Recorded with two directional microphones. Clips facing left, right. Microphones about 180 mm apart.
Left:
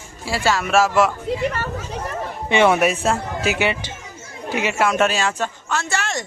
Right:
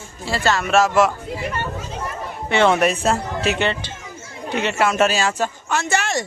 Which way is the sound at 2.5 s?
10° left (ahead or behind).